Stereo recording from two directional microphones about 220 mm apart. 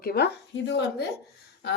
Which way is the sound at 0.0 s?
45° left (ahead or behind).